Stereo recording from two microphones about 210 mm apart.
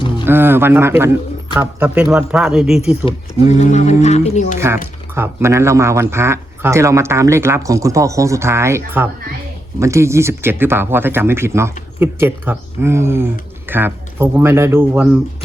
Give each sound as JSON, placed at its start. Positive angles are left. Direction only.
{"t": 0.3, "sound": "speech", "side_deg": -10}
{"t": 3.3, "sound": "speech", "side_deg": -20}
{"t": 3.6, "sound": "speech", "side_deg": 35}
{"t": 5.1, "sound": "speech", "side_deg": -10}